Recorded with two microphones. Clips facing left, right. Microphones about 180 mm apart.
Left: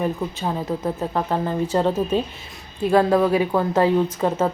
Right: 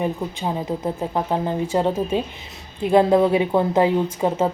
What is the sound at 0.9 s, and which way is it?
A woman's voice, 15° right (ahead or behind).